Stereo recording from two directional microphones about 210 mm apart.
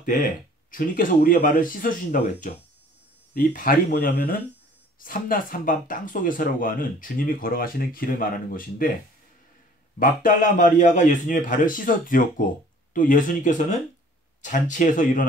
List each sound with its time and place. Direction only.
0.0 s speech: 40° left (ahead or behind)
3.3 s speech: 40° left (ahead or behind)
9.9 s speech: 40° left (ahead or behind)